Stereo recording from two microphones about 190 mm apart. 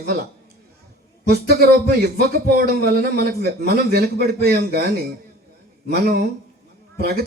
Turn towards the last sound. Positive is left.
turn(degrees=-55)  # may be behind; listen again after turning